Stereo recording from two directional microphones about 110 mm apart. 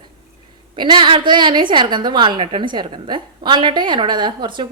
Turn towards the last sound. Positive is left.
turn(degrees=-45)  # may be behind; listen again after turning